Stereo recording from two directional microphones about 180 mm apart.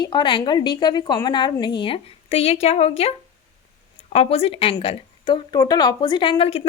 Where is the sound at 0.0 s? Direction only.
25° left (ahead or behind).